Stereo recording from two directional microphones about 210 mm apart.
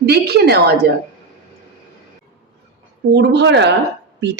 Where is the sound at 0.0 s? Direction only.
50° right (ahead or behind).